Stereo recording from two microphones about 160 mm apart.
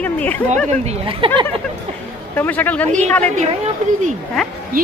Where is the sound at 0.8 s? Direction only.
40° right (ahead or behind).